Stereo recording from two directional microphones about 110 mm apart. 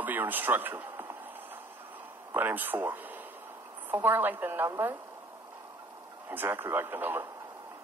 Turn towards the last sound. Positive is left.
turn(degrees=-20)  # may be behind; listen again after turning